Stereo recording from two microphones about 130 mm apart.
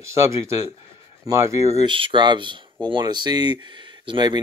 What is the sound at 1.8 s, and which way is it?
Speech, 40° right (ahead or behind).